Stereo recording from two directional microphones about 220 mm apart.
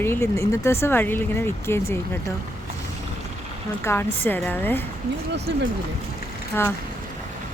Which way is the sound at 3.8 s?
10° left (ahead or behind).